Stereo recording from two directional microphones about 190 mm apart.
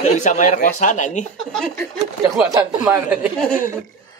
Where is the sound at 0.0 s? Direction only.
40° left (ahead or behind).